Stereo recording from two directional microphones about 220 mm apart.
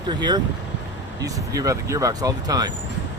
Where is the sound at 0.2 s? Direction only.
20° right (ahead or behind).